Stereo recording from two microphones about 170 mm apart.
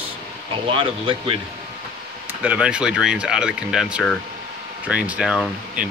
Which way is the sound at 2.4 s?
5° right (ahead or behind).